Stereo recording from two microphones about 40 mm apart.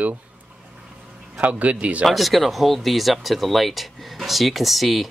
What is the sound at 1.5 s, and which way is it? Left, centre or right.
Speech, right.